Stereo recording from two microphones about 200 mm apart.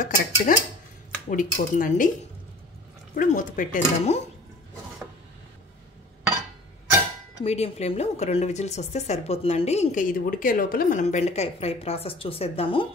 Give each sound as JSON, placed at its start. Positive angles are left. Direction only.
{"t": 0.0, "sound": "speech", "side_deg": 45}
{"t": 3.2, "sound": "speech", "side_deg": 40}
{"t": 7.4, "sound": "speech", "side_deg": 30}